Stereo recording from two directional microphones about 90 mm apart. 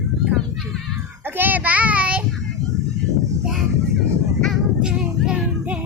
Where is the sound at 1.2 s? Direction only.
20° right (ahead or behind).